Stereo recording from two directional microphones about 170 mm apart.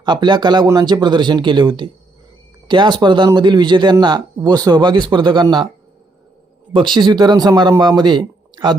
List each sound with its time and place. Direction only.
0.0 s speech: 25° right (ahead or behind)
6.7 s speech: 30° right (ahead or behind)